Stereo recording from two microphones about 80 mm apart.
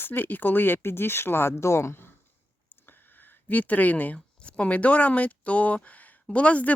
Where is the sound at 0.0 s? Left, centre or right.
Left.